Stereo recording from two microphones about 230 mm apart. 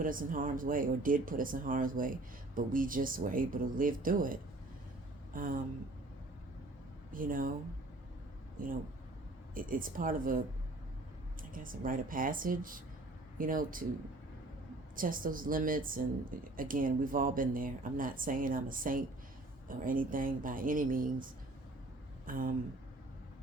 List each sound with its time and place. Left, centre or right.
0.0 s speech: right
7.1 s speech: right
8.6 s speech: right
11.5 s speech: right
14.9 s speech: right
22.3 s speech: right